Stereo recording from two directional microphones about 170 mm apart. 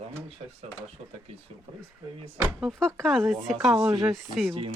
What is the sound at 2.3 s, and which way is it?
Speech, 10° right (ahead or behind).